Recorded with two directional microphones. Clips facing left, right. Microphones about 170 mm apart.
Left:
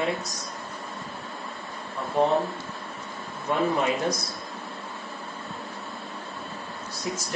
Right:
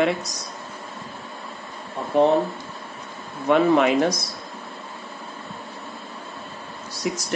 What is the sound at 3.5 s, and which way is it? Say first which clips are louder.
Speech: right 7 dB; 85° right.